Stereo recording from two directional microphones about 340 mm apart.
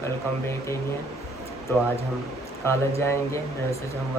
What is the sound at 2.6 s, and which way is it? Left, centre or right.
Speech, centre.